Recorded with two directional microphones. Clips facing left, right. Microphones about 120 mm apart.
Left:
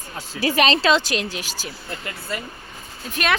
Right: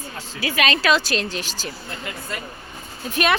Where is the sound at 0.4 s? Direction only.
35° left (ahead or behind); by 1.7 s 10° left (ahead or behind).